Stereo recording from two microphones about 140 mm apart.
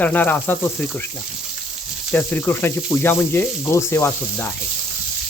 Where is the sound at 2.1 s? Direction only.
15° left (ahead or behind).